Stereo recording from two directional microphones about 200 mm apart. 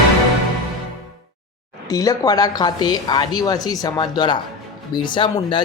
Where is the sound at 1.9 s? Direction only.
15° left (ahead or behind).